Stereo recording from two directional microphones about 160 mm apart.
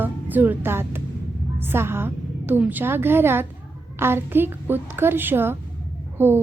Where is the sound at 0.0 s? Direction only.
10° right (ahead or behind).